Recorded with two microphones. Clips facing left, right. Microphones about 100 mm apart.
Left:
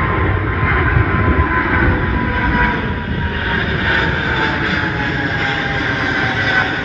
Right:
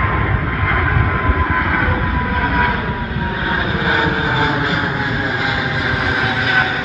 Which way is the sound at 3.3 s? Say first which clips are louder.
Right 1 dB; 20° right (ahead or behind).